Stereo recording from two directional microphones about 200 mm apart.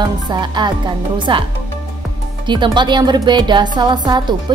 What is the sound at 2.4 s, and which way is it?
Speech, 25° right (ahead or behind).